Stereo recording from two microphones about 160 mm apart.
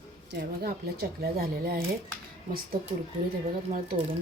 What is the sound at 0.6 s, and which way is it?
A woman's voice, 75° right (ahead or behind).